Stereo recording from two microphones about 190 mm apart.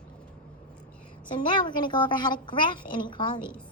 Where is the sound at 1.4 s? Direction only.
25° left (ahead or behind).